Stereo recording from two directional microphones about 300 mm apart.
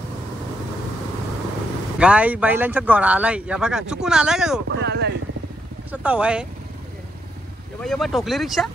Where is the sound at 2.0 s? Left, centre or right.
Centre.